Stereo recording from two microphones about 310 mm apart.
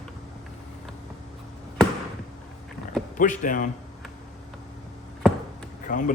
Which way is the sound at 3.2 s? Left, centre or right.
Left.